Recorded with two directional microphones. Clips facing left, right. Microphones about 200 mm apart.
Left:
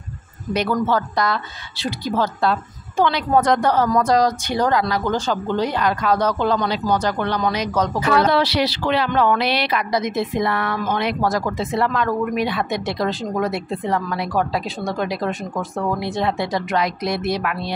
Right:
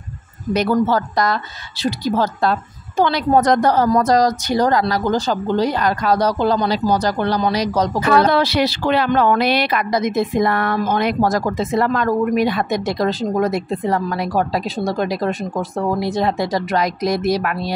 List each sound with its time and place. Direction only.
0.5 s speech: 40° right (ahead or behind)
8.3 s speech: 50° right (ahead or behind)